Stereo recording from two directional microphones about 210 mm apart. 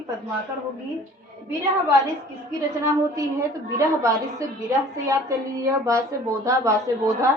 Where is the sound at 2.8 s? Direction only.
15° right (ahead or behind).